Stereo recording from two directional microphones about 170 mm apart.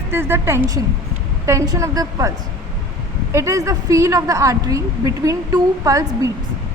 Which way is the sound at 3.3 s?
15° right (ahead or behind).